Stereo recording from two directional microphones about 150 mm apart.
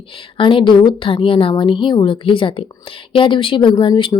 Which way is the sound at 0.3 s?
35° left (ahead or behind).